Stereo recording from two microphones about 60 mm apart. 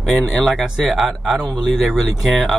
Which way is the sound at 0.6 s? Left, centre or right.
Centre.